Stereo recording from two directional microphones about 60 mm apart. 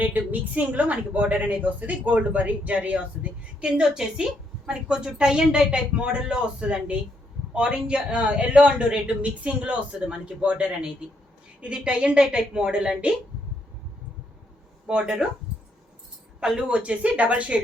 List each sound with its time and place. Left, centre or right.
0.0 s a woman's voice: right
3.6 s a woman's voice: centre
14.8 s a woman's voice: centre
16.4 s a woman's voice: centre